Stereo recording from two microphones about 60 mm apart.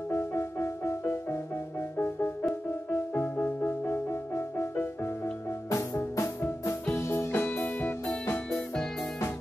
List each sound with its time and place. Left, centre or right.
0.1 s music: left
5.7 s music: left
7.2 s music: left
8.5 s music: centre